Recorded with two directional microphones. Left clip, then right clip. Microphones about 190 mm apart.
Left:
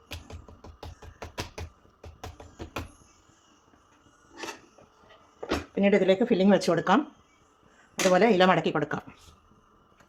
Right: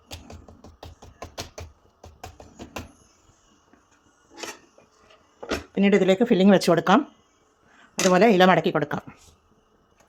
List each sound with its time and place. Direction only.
5.7 s speech: 35° right (ahead or behind)